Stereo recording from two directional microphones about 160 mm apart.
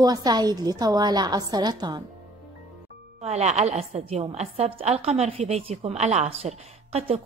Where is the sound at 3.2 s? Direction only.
40° right (ahead or behind).